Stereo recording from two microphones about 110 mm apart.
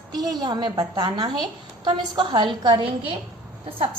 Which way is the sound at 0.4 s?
40° right (ahead or behind).